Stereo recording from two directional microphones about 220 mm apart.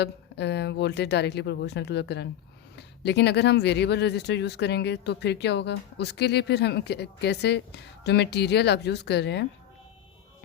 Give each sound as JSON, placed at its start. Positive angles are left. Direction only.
{"t": 0.0, "sound": "speech", "side_deg": 50}